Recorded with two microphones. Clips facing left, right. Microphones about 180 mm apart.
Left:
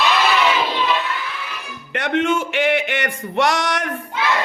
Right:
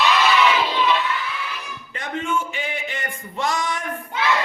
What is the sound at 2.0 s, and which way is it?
Speech, 80° left.